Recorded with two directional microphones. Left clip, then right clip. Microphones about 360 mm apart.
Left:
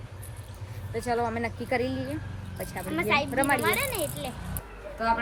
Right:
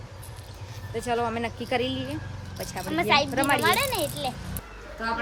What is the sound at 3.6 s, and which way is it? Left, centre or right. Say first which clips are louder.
Speech: right 4 dB; right.